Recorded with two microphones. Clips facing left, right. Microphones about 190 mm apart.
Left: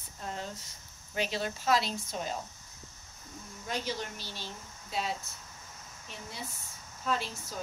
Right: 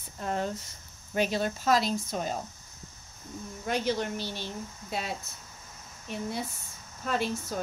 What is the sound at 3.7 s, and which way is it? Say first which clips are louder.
Speech: right 7 dB; 60° right (ahead or behind).